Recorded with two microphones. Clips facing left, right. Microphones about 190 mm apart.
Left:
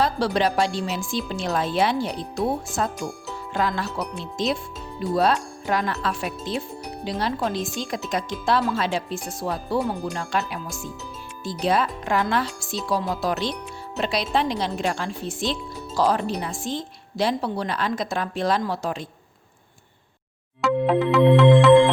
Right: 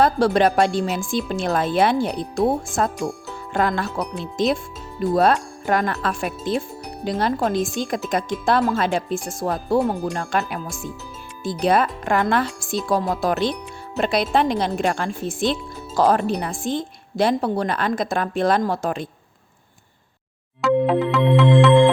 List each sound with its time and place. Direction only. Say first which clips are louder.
0.0 s speech: right 5 dB; 50° right (ahead or behind)
3.0 s speech: right 4 dB; centre (ahead or behind)
3.5 s speech: right 4 dB; 50° right (ahead or behind)
20.6 s music: right 2 dB; centre (ahead or behind)